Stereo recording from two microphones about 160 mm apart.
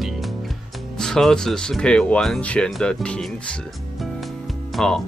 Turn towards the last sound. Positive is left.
turn(degrees=5)  # may be behind; listen again after turning